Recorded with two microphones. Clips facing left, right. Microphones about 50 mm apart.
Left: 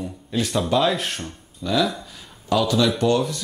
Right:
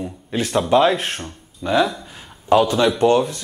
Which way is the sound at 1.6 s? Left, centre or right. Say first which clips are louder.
Right 4 dB; right.